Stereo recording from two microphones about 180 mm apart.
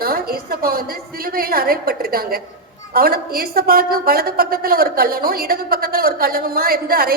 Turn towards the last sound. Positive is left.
turn(degrees=-55)  # may be behind; listen again after turning